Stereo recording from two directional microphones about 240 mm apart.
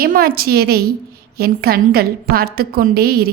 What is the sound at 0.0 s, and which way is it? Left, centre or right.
A woman's voice, right.